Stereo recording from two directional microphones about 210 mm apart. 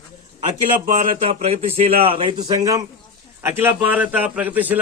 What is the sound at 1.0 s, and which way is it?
A man's voice, 25° right (ahead or behind).